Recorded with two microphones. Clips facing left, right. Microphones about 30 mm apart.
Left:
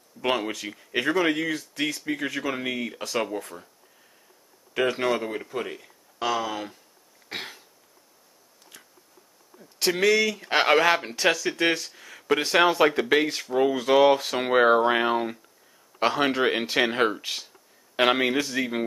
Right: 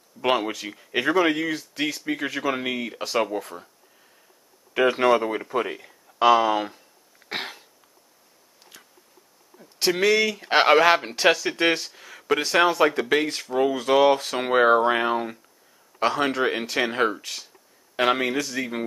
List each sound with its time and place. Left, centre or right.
0.2 s speech: centre
1.5 s speech: centre
5.2 s speech: right
7.2 s cough: right
9.6 s speech: centre; by 11.9 s right
11.9 s a sound: centre
12.4 s speech: centre